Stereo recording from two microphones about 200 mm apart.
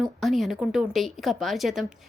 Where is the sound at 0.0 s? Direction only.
Centre (ahead or behind).